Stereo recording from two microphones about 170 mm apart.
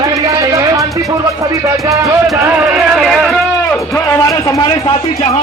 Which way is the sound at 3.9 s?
15° left (ahead or behind).